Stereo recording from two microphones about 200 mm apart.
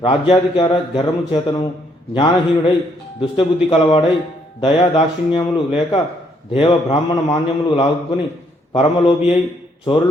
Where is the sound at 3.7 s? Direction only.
30° left (ahead or behind).